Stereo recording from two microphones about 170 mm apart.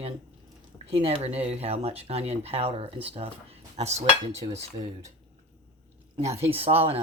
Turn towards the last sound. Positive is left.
turn(degrees=-35)  # may be behind; listen again after turning